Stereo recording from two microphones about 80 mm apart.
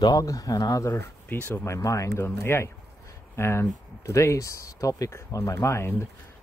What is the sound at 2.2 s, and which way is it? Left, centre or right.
Speech, left.